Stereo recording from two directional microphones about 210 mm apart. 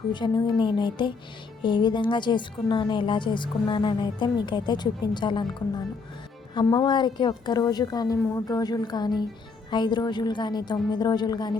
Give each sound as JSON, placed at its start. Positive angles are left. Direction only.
{"t": 0.1, "sound": "a woman's voice", "side_deg": 20}
{"t": 6.5, "sound": "a woman's voice", "side_deg": 20}